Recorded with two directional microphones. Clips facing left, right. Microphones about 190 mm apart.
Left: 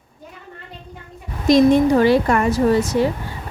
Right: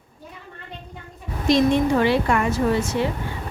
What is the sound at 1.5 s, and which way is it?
Speech, 40° left (ahead or behind).